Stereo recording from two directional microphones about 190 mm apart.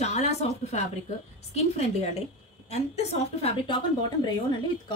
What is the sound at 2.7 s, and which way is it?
A woman's voice, 35° left (ahead or behind).